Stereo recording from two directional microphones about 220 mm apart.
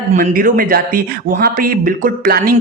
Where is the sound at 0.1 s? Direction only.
35° right (ahead or behind).